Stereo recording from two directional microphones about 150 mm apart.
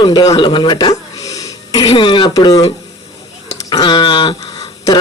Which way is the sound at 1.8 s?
35° left (ahead or behind).